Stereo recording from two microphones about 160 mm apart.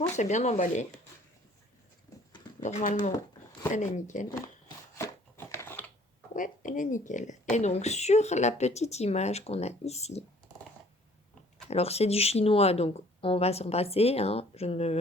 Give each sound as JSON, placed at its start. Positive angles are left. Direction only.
{"t": 0.2, "sound": "a woman's voice", "side_deg": 45}
{"t": 2.6, "sound": "a woman's voice", "side_deg": 50}
{"t": 5.5, "sound": "typing", "side_deg": 15}
{"t": 6.3, "sound": "a woman's voice", "side_deg": 55}
{"t": 11.7, "sound": "speech", "side_deg": 40}